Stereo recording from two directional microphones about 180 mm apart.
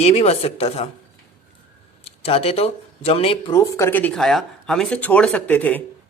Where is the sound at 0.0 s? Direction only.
35° left (ahead or behind).